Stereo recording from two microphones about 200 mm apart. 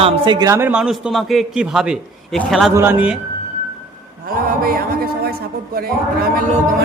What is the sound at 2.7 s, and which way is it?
Speech, 10° right (ahead or behind).